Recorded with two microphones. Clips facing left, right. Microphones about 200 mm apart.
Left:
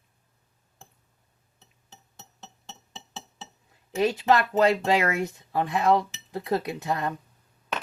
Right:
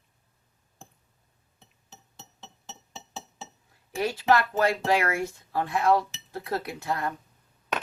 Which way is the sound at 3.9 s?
20° left (ahead or behind).